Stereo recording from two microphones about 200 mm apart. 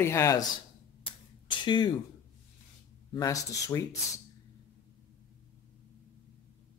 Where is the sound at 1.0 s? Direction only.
25° left (ahead or behind).